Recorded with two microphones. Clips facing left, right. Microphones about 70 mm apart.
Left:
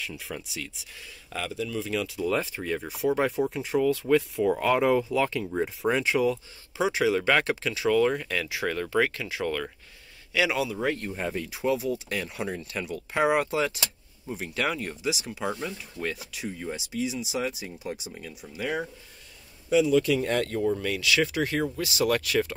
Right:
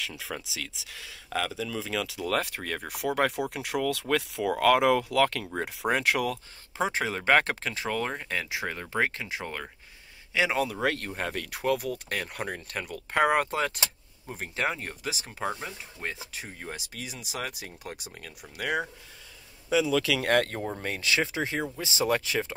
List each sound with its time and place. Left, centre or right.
0.0 s speech: right
6.8 s speech: right
10.6 s speech: right
14.5 s speech: right
20.0 s speech: right
20.7 s speech: right